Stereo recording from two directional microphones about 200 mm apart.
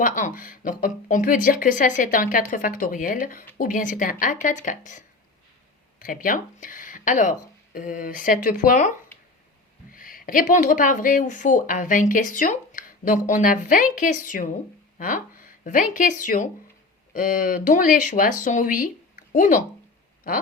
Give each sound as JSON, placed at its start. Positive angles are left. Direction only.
{"t": 0.0, "sound": "speech", "side_deg": 40}